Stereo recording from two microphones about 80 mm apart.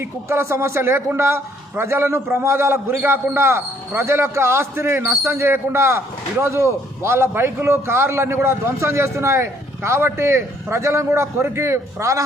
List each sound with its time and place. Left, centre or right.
0.0 s a man's voice: right